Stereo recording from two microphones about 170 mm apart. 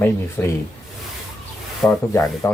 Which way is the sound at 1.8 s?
20° left (ahead or behind).